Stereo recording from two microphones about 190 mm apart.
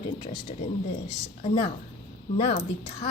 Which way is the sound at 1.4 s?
25° left (ahead or behind).